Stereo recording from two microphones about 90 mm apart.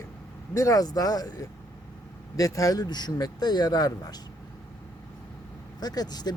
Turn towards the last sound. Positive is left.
turn(degrees=50)  # may be behind; listen again after turning